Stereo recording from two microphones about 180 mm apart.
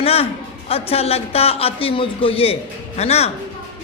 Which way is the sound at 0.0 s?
35° left (ahead or behind).